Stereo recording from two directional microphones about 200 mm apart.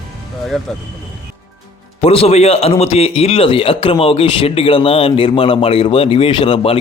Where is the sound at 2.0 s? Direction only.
30° left (ahead or behind).